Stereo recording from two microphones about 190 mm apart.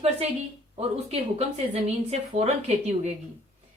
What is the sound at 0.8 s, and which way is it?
Speech, 35° right (ahead or behind).